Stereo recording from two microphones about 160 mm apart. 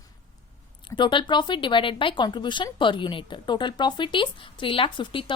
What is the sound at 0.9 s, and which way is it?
A woman's voice, 30° left (ahead or behind).